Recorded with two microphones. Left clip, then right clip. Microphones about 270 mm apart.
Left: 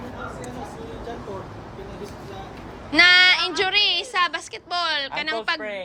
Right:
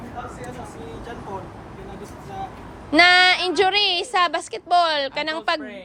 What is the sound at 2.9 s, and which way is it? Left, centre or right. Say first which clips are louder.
A woman's voice: even; centre.